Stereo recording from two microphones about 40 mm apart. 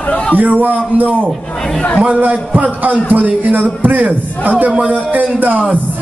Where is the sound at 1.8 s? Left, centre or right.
Left.